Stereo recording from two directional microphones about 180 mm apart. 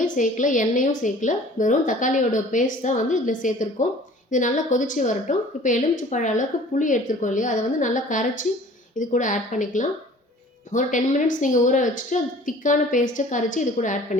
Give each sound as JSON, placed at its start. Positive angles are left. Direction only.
{"t": 0.0, "sound": "a woman's voice", "side_deg": 45}